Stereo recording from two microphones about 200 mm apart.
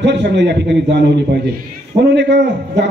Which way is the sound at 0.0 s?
60° right (ahead or behind).